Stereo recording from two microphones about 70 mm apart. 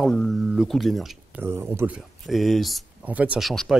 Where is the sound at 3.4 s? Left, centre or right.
Centre.